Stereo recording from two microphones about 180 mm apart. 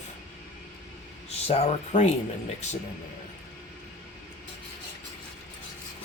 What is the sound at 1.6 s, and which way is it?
Speech, 40° left (ahead or behind).